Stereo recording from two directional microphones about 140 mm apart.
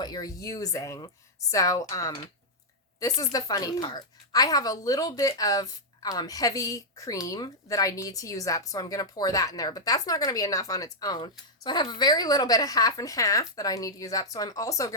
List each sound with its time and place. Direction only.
0.0 s a woman's voice: 25° left (ahead or behind)